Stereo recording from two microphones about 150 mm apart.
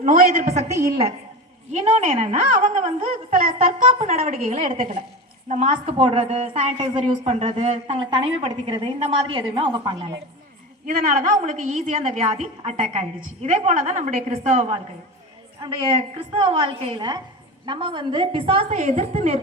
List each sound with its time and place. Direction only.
0.0 s a woman's voice: 55° right (ahead or behind)
1.7 s a woman's voice: 40° right (ahead or behind); by 3.8 s 65° right (ahead or behind)
3.8 s a woman's voice: 45° right (ahead or behind)
4.2 s a woman's voice: 65° right (ahead or behind)
5.5 s a woman's voice: 45° right (ahead or behind)
10.8 s a woman's voice: 60° right (ahead or behind); by 14.8 s 40° right (ahead or behind)
16.0 s a woman's voice: 40° right (ahead or behind)